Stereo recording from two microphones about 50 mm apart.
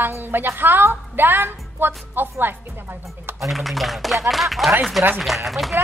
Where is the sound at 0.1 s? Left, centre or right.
Right.